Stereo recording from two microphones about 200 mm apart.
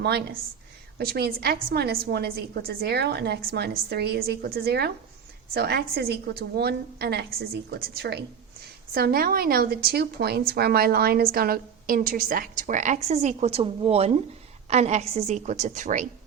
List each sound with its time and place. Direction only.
0.0 s a woman's voice: 55° right (ahead or behind); by 16.0 s 40° right (ahead or behind)